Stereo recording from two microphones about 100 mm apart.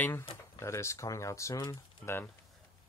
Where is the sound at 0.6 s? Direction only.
30° left (ahead or behind).